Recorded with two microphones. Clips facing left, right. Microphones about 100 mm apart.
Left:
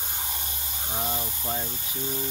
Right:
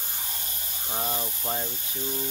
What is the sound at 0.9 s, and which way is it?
Speech, centre (ahead or behind).